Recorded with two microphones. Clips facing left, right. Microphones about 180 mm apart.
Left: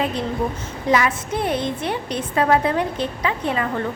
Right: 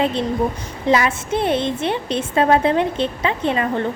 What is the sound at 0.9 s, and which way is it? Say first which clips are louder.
A woman's voice: right 2 dB; 25° right (ahead or behind).